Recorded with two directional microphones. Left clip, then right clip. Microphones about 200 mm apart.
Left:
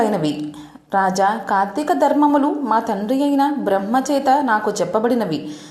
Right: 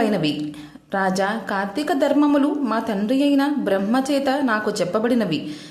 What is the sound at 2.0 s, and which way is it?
Speech, 25° right (ahead or behind).